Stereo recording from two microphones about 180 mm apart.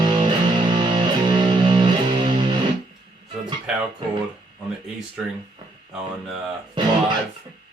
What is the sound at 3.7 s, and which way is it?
Music, 5° right (ahead or behind).